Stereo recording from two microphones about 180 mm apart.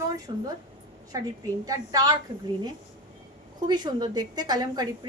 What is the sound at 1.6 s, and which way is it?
Speech, 20° right (ahead or behind).